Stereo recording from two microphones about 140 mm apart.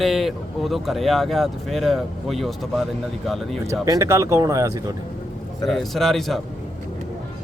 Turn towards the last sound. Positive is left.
turn(degrees=0)  # may be behind; listen again after turning